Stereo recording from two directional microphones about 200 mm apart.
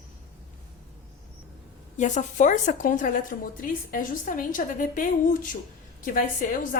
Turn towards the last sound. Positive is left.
turn(degrees=40)  # may be behind; listen again after turning